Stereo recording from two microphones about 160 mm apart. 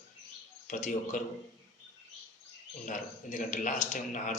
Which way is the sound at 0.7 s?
50° left (ahead or behind).